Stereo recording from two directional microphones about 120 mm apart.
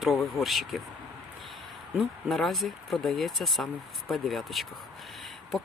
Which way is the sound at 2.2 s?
Centre (ahead or behind).